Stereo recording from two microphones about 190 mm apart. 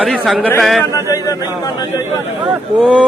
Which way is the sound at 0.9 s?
20° left (ahead or behind).